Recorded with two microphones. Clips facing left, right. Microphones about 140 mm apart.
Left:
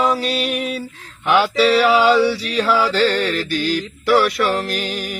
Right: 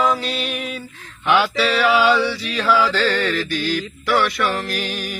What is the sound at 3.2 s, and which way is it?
Music, 30° left (ahead or behind).